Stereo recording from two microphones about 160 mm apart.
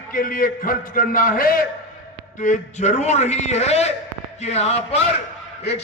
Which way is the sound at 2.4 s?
50° left (ahead or behind).